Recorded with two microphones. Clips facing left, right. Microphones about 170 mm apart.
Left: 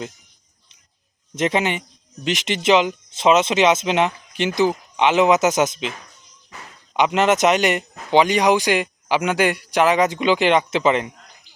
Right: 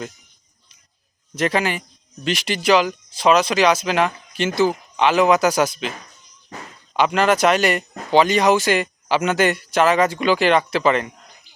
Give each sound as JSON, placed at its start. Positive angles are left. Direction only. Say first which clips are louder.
{"t": 1.4, "sound": "speech", "louder": "even", "side_deg": 20}
{"t": 6.9, "sound": "speech", "louder": "even", "side_deg": 20}